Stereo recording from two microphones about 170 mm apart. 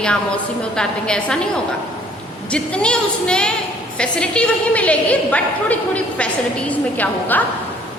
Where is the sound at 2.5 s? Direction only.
5° left (ahead or behind).